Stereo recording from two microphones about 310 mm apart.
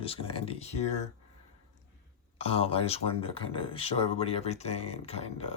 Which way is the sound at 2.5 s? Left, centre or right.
Centre.